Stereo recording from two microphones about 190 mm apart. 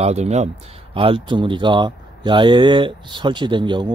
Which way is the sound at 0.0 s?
35° right (ahead or behind).